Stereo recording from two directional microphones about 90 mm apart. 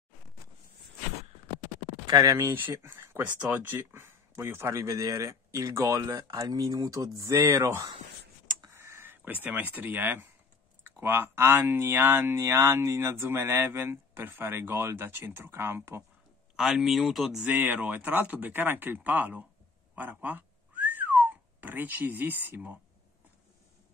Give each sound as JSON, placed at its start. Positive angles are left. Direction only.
{"t": 2.0, "sound": "speech", "side_deg": -45}
{"t": 2.8, "sound": "speech", "side_deg": -30}
{"t": 8.7, "sound": "a sound", "side_deg": -30}
{"t": 11.0, "sound": "speech", "side_deg": -25}
{"t": 16.5, "sound": "speech", "side_deg": -5}
{"t": 17.5, "sound": "speech", "side_deg": -20}
{"t": 20.0, "sound": "whistling", "side_deg": -20}